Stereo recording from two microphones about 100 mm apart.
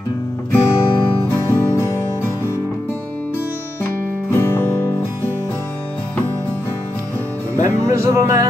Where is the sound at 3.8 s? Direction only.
20° left (ahead or behind).